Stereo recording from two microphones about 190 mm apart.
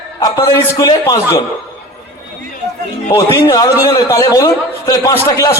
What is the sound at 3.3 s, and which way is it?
A man's voice, 15° left (ahead or behind).